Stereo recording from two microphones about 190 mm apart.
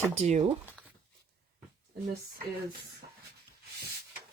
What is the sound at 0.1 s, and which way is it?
Speech, 35° right (ahead or behind).